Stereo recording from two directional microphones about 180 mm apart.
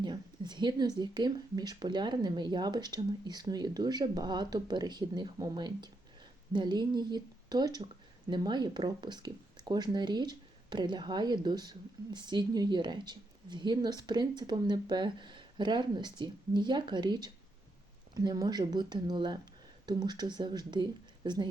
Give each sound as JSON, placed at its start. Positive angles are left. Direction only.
{"t": 0.0, "sound": "speech", "side_deg": -25}